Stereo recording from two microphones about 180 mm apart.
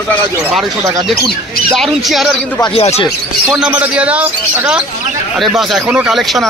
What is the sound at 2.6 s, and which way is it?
Speech, 35° left (ahead or behind).